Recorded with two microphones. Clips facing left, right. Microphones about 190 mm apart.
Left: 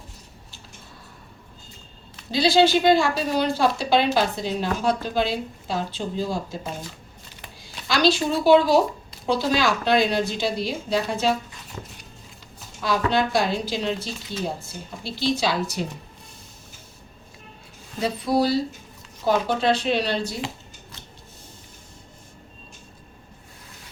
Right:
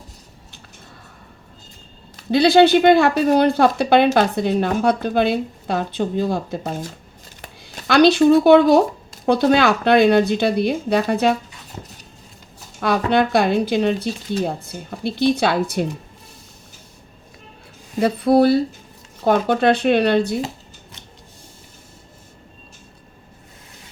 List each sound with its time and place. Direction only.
2.3 s speech: 60° right (ahead or behind)
12.8 s speech: 60° right (ahead or behind)
18.0 s speech: 60° right (ahead or behind)